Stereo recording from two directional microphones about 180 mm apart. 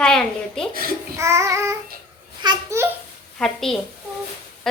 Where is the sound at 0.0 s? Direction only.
5° left (ahead or behind).